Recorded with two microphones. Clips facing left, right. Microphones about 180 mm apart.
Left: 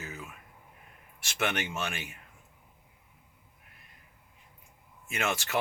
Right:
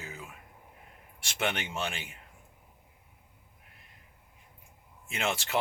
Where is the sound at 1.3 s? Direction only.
20° right (ahead or behind).